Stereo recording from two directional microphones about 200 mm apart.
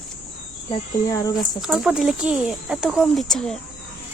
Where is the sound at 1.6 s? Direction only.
5° right (ahead or behind).